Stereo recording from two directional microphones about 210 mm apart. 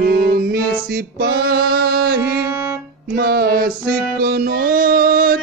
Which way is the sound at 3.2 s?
50° right (ahead or behind).